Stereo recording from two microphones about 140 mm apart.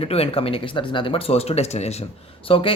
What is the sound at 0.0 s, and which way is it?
Speech, 45° left (ahead or behind).